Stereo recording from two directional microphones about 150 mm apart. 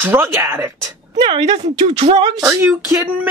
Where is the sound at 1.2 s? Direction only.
45° right (ahead or behind).